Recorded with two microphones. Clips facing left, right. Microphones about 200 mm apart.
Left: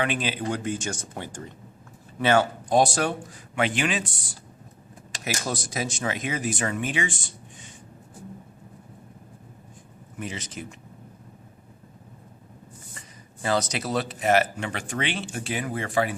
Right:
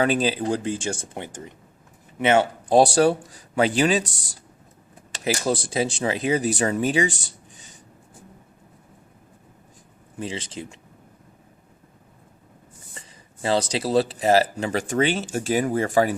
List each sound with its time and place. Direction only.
0.0 s speech: 35° right (ahead or behind)
5.2 s speech: 30° right (ahead or behind)
10.2 s speech: 30° right (ahead or behind)
13.4 s speech: 30° right (ahead or behind)